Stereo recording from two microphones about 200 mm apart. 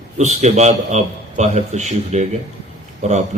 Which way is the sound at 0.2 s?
35° right (ahead or behind).